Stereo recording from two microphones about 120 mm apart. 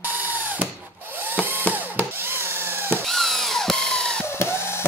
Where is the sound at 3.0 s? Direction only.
Centre (ahead or behind).